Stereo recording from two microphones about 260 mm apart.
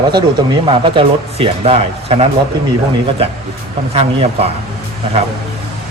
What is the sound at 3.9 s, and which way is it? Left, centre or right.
Speech, right.